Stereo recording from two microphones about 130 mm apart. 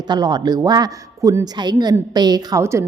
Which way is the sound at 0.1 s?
30° right (ahead or behind).